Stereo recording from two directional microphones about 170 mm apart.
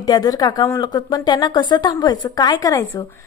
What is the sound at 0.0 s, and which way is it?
A woman's voice, 25° left (ahead or behind).